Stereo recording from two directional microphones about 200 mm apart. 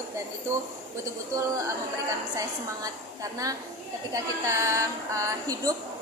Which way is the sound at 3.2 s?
15° right (ahead or behind).